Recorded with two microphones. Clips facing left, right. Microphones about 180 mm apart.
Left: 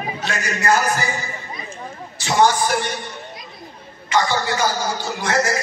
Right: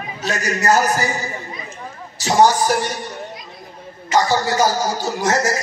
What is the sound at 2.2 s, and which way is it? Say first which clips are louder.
Speech: right 2 dB; 40° right (ahead or behind).